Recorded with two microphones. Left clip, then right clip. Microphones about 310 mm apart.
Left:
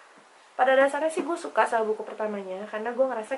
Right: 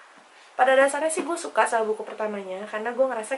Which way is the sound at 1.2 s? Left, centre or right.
Centre.